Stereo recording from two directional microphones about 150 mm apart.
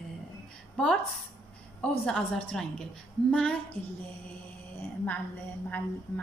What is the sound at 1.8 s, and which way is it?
A woman's voice, 5° left (ahead or behind).